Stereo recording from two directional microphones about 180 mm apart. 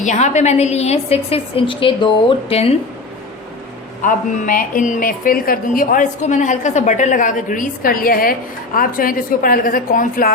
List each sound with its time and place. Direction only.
0.0 s a woman's voice: 40° left (ahead or behind)
4.0 s a woman's voice: 50° left (ahead or behind)